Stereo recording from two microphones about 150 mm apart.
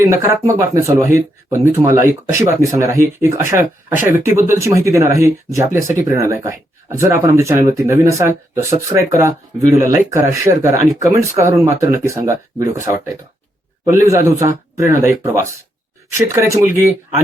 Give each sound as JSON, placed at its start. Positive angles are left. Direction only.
{"t": 0.0, "sound": "speech", "side_deg": -20}